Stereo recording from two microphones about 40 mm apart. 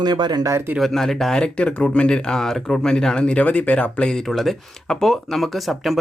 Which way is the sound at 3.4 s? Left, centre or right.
Left.